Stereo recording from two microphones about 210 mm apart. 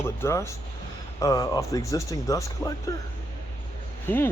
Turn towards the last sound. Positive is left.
turn(degrees=10)  # may be behind; listen again after turning